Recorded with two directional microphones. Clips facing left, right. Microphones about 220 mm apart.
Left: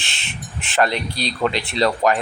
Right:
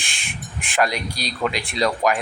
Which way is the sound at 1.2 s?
30° left (ahead or behind).